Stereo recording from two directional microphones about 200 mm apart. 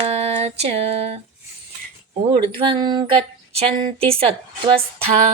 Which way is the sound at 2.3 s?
25° right (ahead or behind).